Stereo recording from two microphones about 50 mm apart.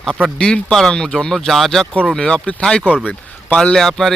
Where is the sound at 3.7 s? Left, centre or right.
Centre.